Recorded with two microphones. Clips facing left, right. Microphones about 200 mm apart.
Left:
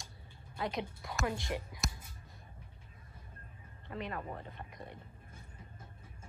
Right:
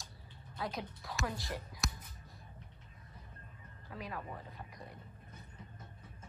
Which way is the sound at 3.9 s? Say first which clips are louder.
Left 4 dB; centre (ahead or behind).